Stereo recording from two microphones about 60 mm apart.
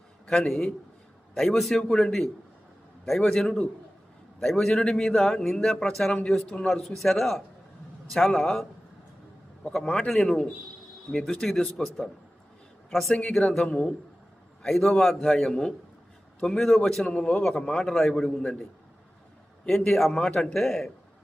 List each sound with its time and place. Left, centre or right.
0.3 s a man's voice: centre
3.3 s a man's voice: centre
9.6 s a man's voice: centre
11.1 s a man's voice: centre
13.7 s a man's voice: centre
14.6 s a man's voice: centre
17.0 s a man's voice: centre
19.6 s speech: centre